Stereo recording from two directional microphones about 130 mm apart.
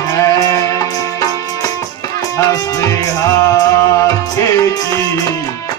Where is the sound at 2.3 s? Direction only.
25° left (ahead or behind).